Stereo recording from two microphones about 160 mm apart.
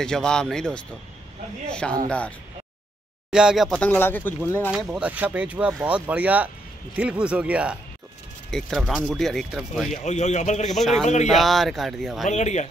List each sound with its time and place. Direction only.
0.0 s speech: 5° left (ahead or behind)
3.3 s speech: 5° right (ahead or behind)
3.8 s speech: 10° left (ahead or behind)
4.6 s speech: 5° right (ahead or behind)
10.0 s a man's voice: 45° left (ahead or behind)
10.7 s speech: centre (ahead or behind)
12.3 s a man's voice: 45° left (ahead or behind)